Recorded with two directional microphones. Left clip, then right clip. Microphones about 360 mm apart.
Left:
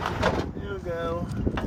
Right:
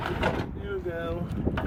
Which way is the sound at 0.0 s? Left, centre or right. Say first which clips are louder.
Left 3 dB; centre.